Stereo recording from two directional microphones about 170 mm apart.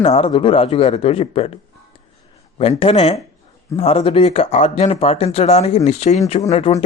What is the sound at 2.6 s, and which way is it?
Speech, 35° left (ahead or behind).